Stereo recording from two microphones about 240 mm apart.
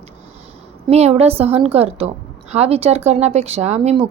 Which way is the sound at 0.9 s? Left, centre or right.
Right.